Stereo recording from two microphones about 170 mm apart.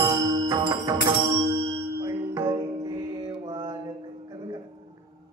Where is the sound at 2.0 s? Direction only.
20° right (ahead or behind).